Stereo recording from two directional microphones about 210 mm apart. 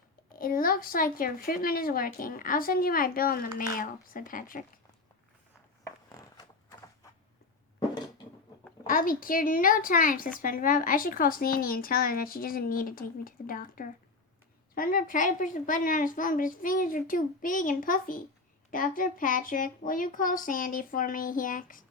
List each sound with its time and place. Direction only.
0.3 s a woman's voice: 45° left (ahead or behind)
5.8 s a sound: 20° left (ahead or behind)
8.9 s a woman's voice: 40° left (ahead or behind)